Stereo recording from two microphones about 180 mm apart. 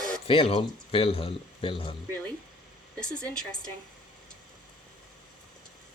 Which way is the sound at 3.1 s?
5° left (ahead or behind).